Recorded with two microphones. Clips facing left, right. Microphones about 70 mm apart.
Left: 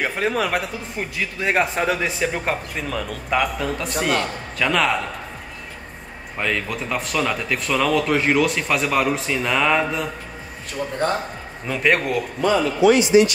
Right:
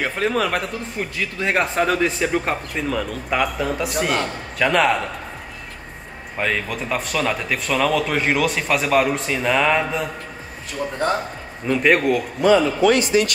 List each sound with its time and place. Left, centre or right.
0.0 s speech: centre
6.3 s speech: centre
11.6 s speech: centre
12.8 s a man's voice: right